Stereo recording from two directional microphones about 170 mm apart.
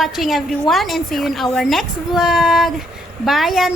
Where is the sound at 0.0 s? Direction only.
Centre (ahead or behind).